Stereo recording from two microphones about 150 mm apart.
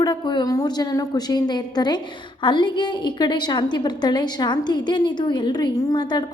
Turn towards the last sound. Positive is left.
turn(degrees=25)  # may be behind; listen again after turning